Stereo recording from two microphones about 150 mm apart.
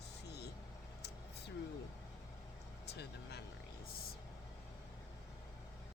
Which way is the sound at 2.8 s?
90° left.